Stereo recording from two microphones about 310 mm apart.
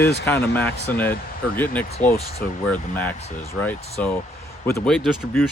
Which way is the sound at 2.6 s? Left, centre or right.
Centre.